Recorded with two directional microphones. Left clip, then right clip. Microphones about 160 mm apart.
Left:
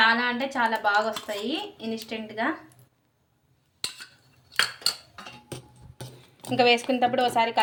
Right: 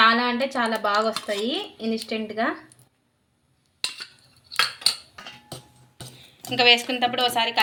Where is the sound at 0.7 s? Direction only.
40° right (ahead or behind).